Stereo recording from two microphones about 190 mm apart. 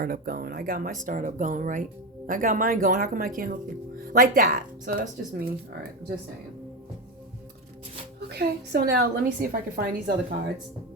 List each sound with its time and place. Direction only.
0.0 s speech: 50° right (ahead or behind)
8.3 s a woman's voice: 55° right (ahead or behind)